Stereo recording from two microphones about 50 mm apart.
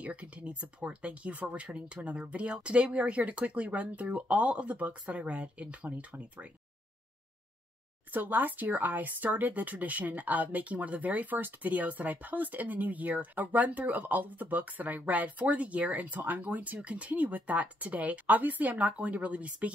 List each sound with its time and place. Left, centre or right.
0.0 s speech: right
8.1 s speech: right